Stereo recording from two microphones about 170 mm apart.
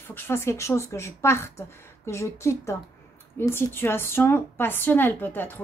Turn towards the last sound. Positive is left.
turn(degrees=10)  # may be behind; listen again after turning